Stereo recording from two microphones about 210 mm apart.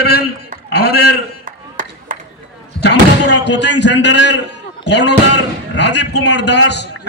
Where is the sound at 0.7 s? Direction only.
50° left (ahead or behind).